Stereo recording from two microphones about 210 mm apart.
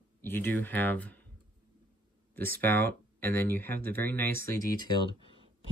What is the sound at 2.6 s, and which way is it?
Speech, 10° left (ahead or behind).